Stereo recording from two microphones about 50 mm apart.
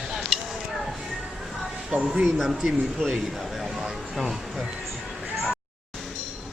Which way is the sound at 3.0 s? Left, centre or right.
Centre.